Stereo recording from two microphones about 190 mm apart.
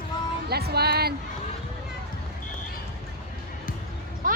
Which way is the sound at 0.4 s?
55° right (ahead or behind).